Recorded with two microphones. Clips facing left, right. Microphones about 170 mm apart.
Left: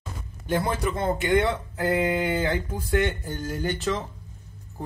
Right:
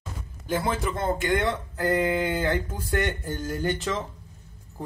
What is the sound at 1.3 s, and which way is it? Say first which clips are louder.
Speech: left 3 dB; 15° left (ahead or behind).